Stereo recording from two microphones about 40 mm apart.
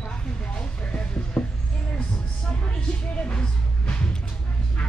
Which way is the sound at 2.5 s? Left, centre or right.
Left.